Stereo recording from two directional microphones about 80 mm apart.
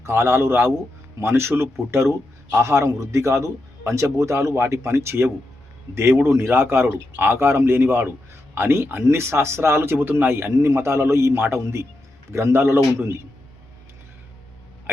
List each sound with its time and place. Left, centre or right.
0.0 s a man's voice: right